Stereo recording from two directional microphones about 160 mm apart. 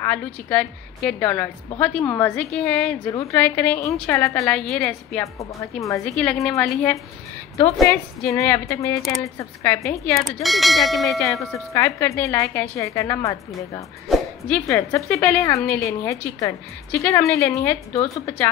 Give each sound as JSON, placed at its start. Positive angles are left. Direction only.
{"t": 0.0, "sound": "a woman's voice", "side_deg": 10}
{"t": 3.1, "sound": "a woman's voice", "side_deg": 20}
{"t": 4.5, "sound": "bell", "side_deg": 5}
{"t": 5.2, "sound": "a woman's voice", "side_deg": 20}
{"t": 6.1, "sound": "bell", "side_deg": 5}
{"t": 6.6, "sound": "a woman's voice", "side_deg": 10}
{"t": 10.1, "sound": "bell", "side_deg": 0}
{"t": 11.7, "sound": "a woman's voice", "side_deg": 20}
{"t": 14.0, "sound": "music", "side_deg": 0}
{"t": 14.7, "sound": "a woman's voice", "side_deg": 15}